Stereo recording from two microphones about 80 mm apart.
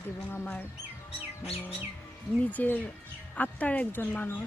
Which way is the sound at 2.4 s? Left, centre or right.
Centre.